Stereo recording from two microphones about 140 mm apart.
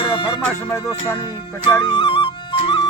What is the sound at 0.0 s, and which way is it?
Music, 35° left (ahead or behind).